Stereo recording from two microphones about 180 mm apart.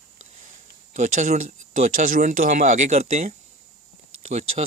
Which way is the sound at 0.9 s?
40° right (ahead or behind).